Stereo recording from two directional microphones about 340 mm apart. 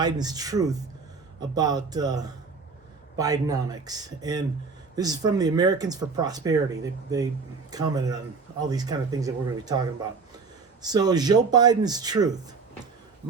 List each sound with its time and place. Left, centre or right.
0.0 s speech: centre
10.8 s speech: centre